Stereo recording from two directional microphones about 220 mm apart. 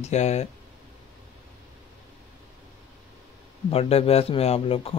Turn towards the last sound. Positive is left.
turn(degrees=25)  # may be behind; listen again after turning